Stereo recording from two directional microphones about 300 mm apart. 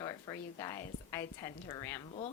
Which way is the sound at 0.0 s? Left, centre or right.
Centre.